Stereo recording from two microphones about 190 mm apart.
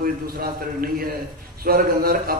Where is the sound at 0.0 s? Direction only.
50° right (ahead or behind).